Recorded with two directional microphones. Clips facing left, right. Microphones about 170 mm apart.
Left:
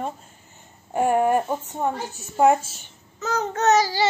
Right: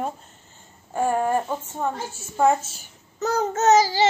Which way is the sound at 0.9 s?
15° left (ahead or behind).